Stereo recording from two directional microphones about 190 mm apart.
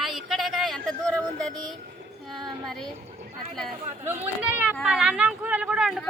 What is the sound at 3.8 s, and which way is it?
Speech, 35° right (ahead or behind).